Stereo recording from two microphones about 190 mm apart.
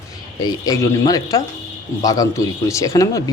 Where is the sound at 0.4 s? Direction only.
20° left (ahead or behind).